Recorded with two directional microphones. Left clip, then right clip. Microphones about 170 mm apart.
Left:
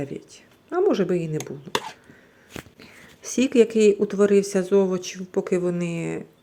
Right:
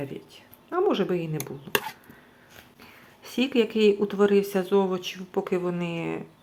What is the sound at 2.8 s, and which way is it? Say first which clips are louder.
Speech: left 5 dB; 40° left (ahead or behind).